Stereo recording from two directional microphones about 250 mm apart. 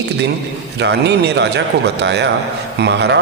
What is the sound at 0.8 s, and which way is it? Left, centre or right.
A man's voice, right.